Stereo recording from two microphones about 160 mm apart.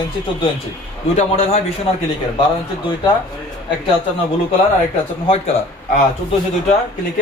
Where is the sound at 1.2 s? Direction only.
45° left (ahead or behind).